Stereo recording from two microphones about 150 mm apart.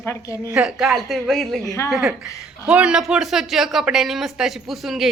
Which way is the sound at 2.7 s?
5° right (ahead or behind).